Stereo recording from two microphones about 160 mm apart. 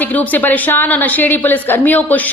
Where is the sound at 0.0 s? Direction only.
10° left (ahead or behind).